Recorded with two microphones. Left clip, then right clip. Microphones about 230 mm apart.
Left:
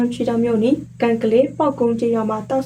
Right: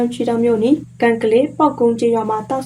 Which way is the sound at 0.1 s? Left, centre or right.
Centre.